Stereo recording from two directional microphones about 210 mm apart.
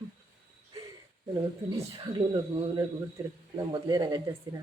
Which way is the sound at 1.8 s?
30° right (ahead or behind).